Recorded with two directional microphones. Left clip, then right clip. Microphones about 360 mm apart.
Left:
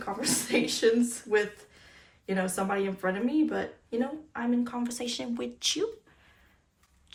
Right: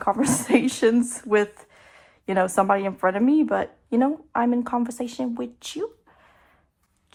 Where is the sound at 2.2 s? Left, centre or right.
Centre.